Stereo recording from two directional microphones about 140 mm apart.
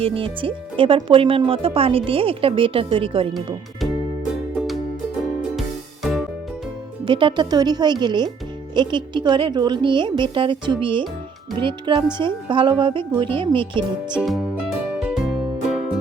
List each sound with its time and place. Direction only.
0.0 s speech: 40° right (ahead or behind)
4.5 s music: centre (ahead or behind)
7.0 s speech: 35° right (ahead or behind)
14.2 s music: 5° right (ahead or behind)